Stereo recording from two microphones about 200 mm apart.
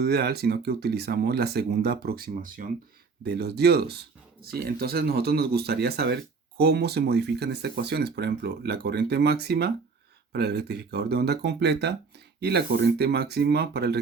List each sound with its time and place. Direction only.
0.0 s speech: 50° right (ahead or behind)
3.2 s speech: 55° right (ahead or behind)